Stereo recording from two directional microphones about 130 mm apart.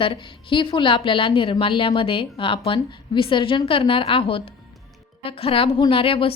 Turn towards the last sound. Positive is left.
turn(degrees=45)  # may be behind; listen again after turning